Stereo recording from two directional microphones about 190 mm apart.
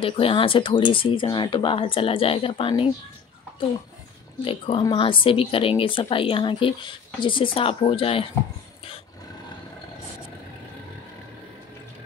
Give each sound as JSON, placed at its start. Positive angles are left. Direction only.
{"t": 0.0, "sound": "a woman's voice", "side_deg": 30}
{"t": 4.5, "sound": "a woman's voice", "side_deg": 30}